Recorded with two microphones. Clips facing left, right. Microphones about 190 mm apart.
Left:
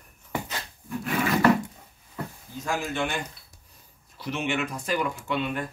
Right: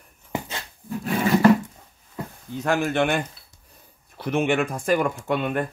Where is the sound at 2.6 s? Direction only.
65° right (ahead or behind).